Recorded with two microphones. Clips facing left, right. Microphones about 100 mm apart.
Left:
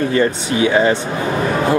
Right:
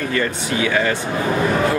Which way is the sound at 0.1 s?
25° left (ahead or behind).